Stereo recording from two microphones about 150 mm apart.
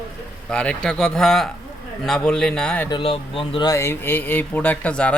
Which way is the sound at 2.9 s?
40° left (ahead or behind).